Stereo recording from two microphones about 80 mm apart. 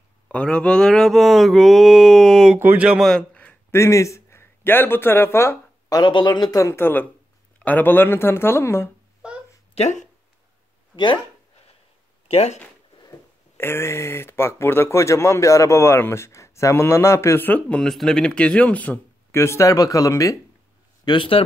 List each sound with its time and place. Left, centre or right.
0.3 s mantra: centre
2.6 s speech: right
3.1 s a sound: centre
3.7 s speech: left
5.9 s speech: left
6.6 s speech: left
9.2 s a sound: centre
13.6 s speech: left
17.6 s speech: centre
19.3 s speech: left
21.0 s a man's voice: left